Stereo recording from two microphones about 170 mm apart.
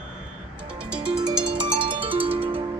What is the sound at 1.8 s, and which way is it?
Music, 30° right (ahead or behind).